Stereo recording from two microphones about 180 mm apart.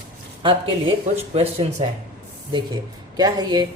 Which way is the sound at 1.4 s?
35° right (ahead or behind).